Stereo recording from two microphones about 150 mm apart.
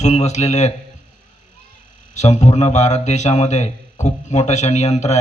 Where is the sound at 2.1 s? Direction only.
50° left (ahead or behind).